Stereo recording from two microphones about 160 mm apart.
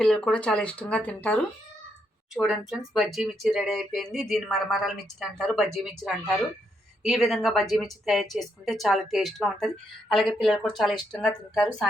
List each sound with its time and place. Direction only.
0.0 s speech: 5° left (ahead or behind)
2.3 s speech: centre (ahead or behind)